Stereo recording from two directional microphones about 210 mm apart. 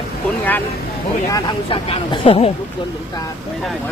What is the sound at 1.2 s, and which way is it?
Speech, 15° left (ahead or behind).